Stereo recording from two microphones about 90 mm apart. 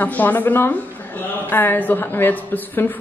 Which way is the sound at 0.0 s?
20° left (ahead or behind).